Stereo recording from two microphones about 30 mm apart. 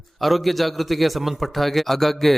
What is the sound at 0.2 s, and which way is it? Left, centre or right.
A man's voice, centre.